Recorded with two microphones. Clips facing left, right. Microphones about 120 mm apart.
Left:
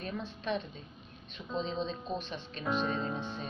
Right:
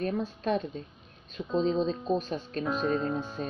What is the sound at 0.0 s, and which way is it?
A woman's voice, 45° right (ahead or behind).